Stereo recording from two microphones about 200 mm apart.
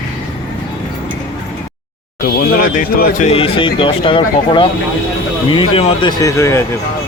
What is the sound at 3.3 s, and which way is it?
Speech, 25° left (ahead or behind).